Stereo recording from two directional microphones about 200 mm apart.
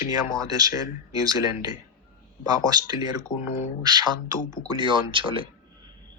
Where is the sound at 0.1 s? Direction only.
20° right (ahead or behind).